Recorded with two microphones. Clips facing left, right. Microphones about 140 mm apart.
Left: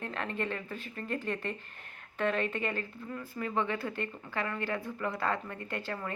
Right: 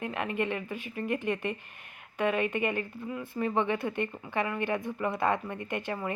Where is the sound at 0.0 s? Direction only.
15° right (ahead or behind).